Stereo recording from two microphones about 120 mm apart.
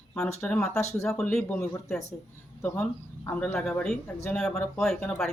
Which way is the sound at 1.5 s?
25° left (ahead or behind).